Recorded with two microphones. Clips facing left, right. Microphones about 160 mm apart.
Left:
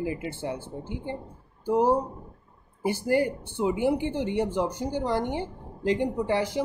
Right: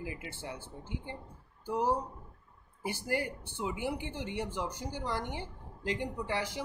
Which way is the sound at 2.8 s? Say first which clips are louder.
Left 10 dB; 25° left (ahead or behind).